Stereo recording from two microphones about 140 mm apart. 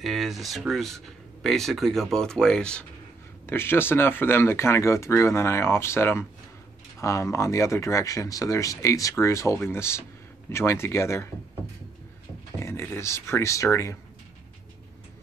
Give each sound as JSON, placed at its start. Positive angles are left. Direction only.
{"t": 0.0, "sound": "speech", "side_deg": 0}
{"t": 3.4, "sound": "speech", "side_deg": 15}
{"t": 12.5, "sound": "speech", "side_deg": 20}